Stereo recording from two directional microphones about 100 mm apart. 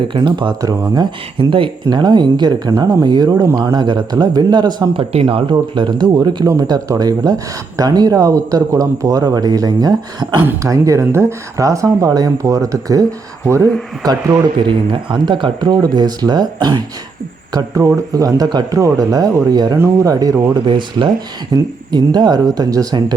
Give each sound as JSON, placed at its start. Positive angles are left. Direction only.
{"t": 0.2, "sound": "speech", "side_deg": -50}
{"t": 5.2, "sound": "speech", "side_deg": -60}
{"t": 14.7, "sound": "speech", "side_deg": -55}
{"t": 17.5, "sound": "speech", "side_deg": -30}
{"t": 20.5, "sound": "speech", "side_deg": -55}